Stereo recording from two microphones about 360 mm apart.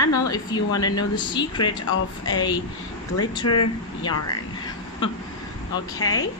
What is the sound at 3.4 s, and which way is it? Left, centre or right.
Speech, left.